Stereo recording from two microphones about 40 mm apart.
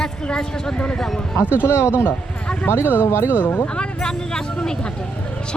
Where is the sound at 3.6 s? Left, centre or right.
Left.